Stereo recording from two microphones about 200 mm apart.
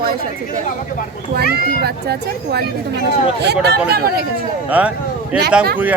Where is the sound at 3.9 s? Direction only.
50° right (ahead or behind).